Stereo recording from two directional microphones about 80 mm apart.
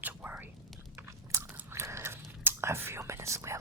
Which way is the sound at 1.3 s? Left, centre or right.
Right.